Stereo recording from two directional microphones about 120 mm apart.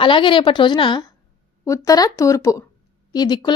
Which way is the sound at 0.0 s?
45° left (ahead or behind).